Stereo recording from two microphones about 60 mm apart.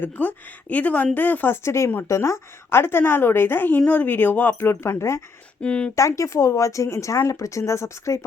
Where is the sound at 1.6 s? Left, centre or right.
Left.